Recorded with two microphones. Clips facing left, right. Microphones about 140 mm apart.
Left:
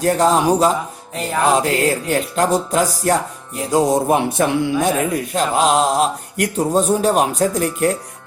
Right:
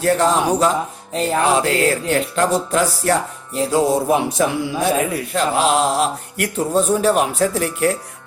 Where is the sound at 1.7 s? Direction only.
15° left (ahead or behind).